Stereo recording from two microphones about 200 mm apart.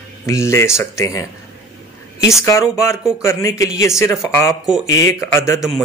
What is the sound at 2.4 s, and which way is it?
A man's voice, 15° left (ahead or behind).